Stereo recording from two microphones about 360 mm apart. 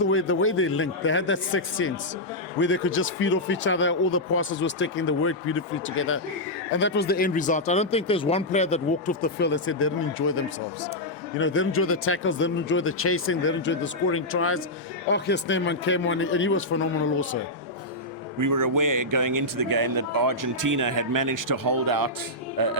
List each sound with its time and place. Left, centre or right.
0.1 s speech: left
18.3 s speech: right